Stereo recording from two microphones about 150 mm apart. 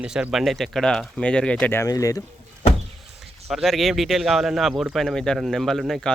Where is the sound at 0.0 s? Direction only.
5° right (ahead or behind); by 2.2 s 20° left (ahead or behind).